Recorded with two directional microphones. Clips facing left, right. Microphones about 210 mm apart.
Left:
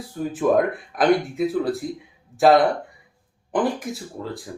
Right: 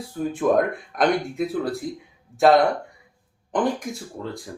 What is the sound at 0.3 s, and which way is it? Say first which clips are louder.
Speech: left 1 dB; centre (ahead or behind).